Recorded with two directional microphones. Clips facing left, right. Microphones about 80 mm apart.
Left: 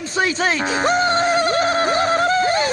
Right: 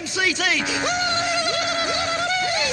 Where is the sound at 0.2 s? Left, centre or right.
Left.